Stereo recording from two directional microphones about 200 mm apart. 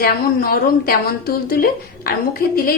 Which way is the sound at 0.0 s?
45° left (ahead or behind).